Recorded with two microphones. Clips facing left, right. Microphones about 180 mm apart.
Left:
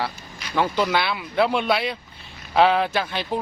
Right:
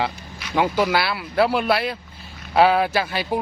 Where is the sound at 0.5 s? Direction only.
10° right (ahead or behind).